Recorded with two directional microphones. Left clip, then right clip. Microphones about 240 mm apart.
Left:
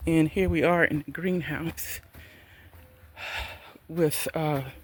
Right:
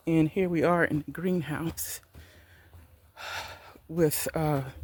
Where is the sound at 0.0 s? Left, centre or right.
Centre.